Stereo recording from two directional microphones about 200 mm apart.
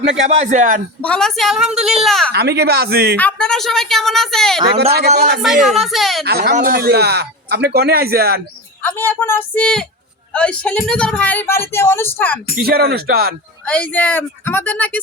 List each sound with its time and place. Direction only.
0.3 s a man's voice: 35° right (ahead or behind)
1.0 s a woman's voice: 5° left (ahead or behind)
2.3 s a man's voice: 55° right (ahead or behind)
3.2 s a woman's voice: 5° left (ahead or behind)
4.9 s a man's voice: 50° right (ahead or behind)
5.4 s a woman's voice: centre (ahead or behind)
6.2 s a man's voice: 50° right (ahead or behind)
8.8 s speech: 10° left (ahead or behind)
12.6 s a man's voice: 50° right (ahead or behind)
13.7 s speech: 5° left (ahead or behind)